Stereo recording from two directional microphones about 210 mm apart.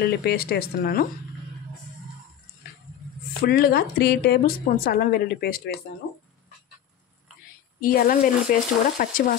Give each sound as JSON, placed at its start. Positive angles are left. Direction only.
{"t": 0.0, "sound": "a woman's voice", "side_deg": 50}
{"t": 3.4, "sound": "a woman's voice", "side_deg": 45}
{"t": 7.8, "sound": "a woman's voice", "side_deg": 45}